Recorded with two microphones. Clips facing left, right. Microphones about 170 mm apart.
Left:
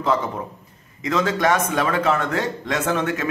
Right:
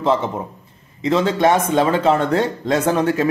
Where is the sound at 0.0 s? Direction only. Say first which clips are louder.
Right 3 dB; 25° right (ahead or behind).